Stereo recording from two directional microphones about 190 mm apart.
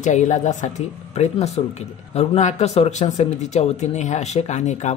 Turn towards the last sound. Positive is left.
turn(degrees=40)  # may be behind; listen again after turning